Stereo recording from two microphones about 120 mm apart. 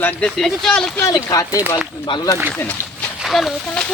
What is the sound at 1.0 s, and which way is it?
Speech, 30° left (ahead or behind).